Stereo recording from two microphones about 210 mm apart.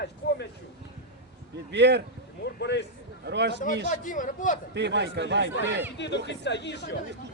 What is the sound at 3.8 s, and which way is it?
Speech, 40° left (ahead or behind).